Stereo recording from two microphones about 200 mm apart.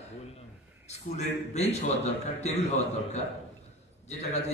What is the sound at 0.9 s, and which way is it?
A man's voice, 35° left (ahead or behind).